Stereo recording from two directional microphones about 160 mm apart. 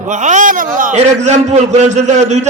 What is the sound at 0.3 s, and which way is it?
A man's voice, 55° right (ahead or behind).